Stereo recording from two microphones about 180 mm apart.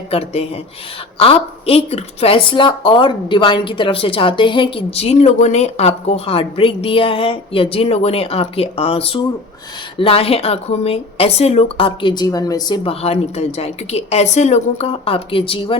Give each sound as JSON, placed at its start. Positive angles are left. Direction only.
{"t": 0.1, "sound": "a woman's voice", "side_deg": 35}